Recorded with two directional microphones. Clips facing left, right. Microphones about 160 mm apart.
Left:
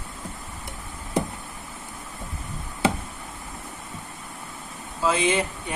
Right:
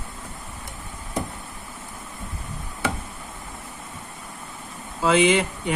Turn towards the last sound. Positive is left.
turn(degrees=-80)